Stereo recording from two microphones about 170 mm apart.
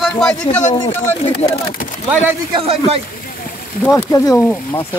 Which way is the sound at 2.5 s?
35° right (ahead or behind).